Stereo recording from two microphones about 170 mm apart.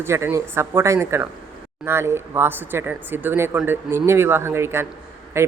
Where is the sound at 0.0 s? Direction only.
15° right (ahead or behind).